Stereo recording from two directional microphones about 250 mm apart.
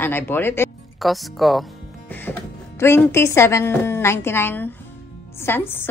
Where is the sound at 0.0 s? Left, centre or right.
Centre.